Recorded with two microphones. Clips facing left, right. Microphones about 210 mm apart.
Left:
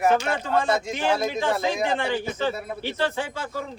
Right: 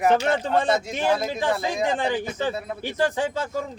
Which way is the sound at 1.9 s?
15° right (ahead or behind).